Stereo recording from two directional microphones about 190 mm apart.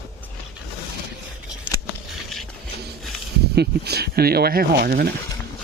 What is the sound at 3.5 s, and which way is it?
Speech, 60° right (ahead or behind).